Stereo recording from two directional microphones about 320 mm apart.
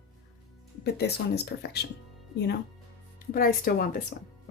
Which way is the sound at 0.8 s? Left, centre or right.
Left.